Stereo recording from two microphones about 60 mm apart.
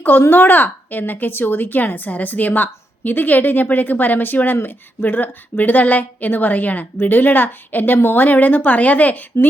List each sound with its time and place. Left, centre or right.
0.0 s a woman's voice: left
9.3 s speech: left